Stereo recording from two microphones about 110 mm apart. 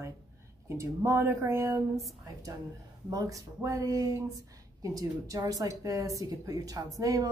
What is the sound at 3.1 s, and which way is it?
A woman's voice, 30° right (ahead or behind).